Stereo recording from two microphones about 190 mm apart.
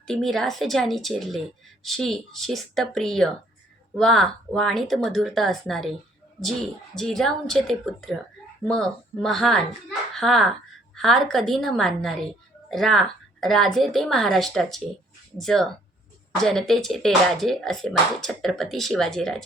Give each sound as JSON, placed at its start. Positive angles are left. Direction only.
{"t": 0.1, "sound": "speech", "side_deg": 0}